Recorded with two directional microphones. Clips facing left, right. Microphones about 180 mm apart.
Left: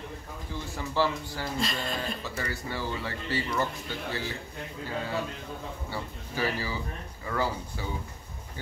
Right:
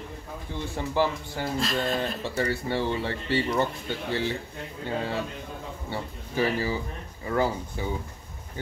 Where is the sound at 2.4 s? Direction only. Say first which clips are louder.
Right 10 dB; 30° right (ahead or behind).